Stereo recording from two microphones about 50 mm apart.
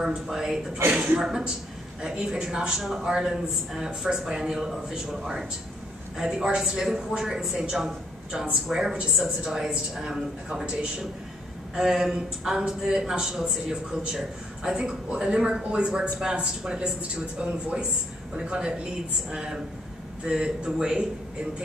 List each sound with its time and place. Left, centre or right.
0.0 s speech: centre
0.9 s a man's voice: right
11.7 s speech: centre